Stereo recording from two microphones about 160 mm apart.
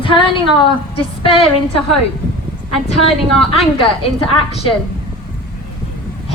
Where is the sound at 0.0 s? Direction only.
35° left (ahead or behind).